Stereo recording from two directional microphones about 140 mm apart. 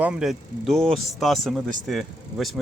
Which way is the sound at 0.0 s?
5° right (ahead or behind).